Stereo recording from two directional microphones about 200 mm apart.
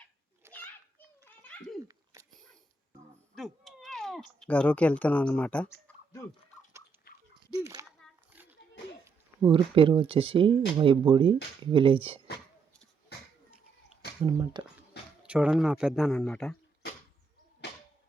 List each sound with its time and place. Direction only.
0.5 s children playing: 5° left (ahead or behind)
2.1 s dog: 15° right (ahead or behind)
3.3 s cat: centre (ahead or behind)
7.6 s a sound: 15° right (ahead or behind)
9.4 s speech: 25° right (ahead or behind)
14.3 s speech: 20° right (ahead or behind)
15.2 s speech: 5° right (ahead or behind)